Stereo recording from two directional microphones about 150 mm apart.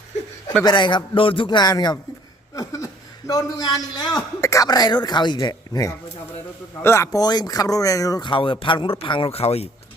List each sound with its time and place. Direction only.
0.6 s a man's voice: 30° left (ahead or behind)
2.6 s chuckle: 20° left (ahead or behind)
4.4 s speech: 20° left (ahead or behind); by 9.6 s 40° left (ahead or behind)